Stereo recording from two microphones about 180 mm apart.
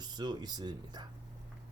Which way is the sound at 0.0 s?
25° right (ahead or behind).